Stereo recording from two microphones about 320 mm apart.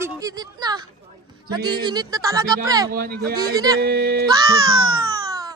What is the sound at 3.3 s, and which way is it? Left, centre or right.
Speech, centre.